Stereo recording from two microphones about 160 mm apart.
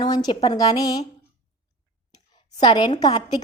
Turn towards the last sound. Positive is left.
turn(degrees=30)  # may be behind; listen again after turning